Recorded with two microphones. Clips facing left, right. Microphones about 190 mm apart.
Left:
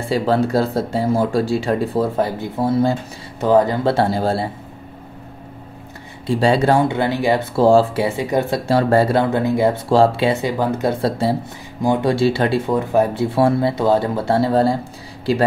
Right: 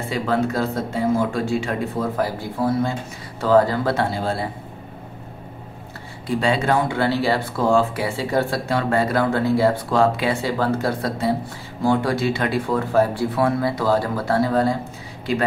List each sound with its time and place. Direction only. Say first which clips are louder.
0.1 s speech: left 5 dB; 30° left (ahead or behind)
3.9 s speech: left 5 dB; 35° left (ahead or behind)
6.2 s speech: left 5 dB; 35° left (ahead or behind)
6.9 s speech: left 2 dB; 15° left (ahead or behind)
7.5 s speech: left 8 dB; 30° left (ahead or behind)
8.6 s speech: left 5 dB; 35° left (ahead or behind); by 9.8 s 20° left (ahead or behind)
9.8 s speech: left 4 dB; 30° left (ahead or behind)
11.8 s speech: left 3 dB; 20° left (ahead or behind)